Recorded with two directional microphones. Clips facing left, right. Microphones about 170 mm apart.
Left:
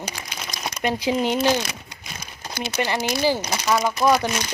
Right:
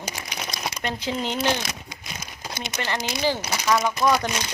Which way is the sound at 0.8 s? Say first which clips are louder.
Left 7 dB; 10° left (ahead or behind).